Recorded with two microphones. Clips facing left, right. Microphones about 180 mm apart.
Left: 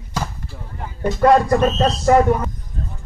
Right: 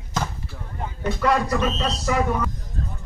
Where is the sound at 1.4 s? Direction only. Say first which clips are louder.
Left 7 dB; 50° left (ahead or behind).